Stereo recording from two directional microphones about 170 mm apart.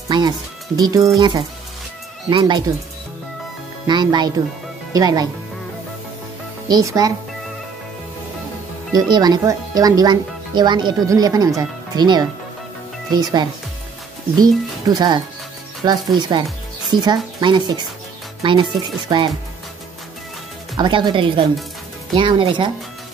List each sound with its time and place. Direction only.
0.7 s speech: 20° right (ahead or behind)
3.8 s speech: 25° right (ahead or behind)
6.7 s speech: 20° right (ahead or behind)
8.9 s speech: 25° right (ahead or behind)
20.7 s speech: 25° right (ahead or behind)